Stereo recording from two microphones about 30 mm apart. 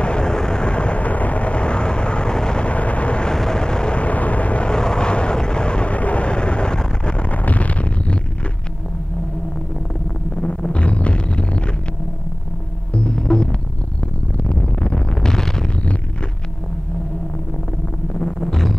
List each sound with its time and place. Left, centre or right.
0.0 s vehicle: left
0.7 s vehicle: left
2.6 s a sound: left
3.3 s vehicle: left
3.9 s vehicle: left
4.6 s vehicle: left
5.9 s vehicle: left
7.2 s a sound: left
10.3 s a sound: left
13.1 s music: left
14.3 s vehicle: left
15.0 s wind noise: left
18.4 s music: centre